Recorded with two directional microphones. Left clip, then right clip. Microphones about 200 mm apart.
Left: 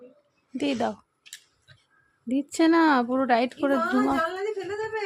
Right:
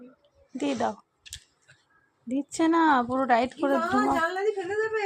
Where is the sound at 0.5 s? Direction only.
20° left (ahead or behind).